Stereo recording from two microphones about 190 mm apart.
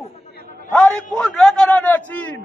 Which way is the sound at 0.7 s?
5° left (ahead or behind).